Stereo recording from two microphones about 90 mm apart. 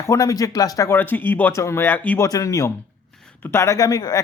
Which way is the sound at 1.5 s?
30° left (ahead or behind).